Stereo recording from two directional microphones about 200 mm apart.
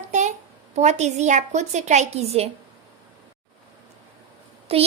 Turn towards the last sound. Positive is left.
turn(degrees=-30)  # may be behind; listen again after turning